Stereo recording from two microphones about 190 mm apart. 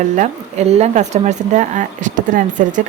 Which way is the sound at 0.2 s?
35° right (ahead or behind).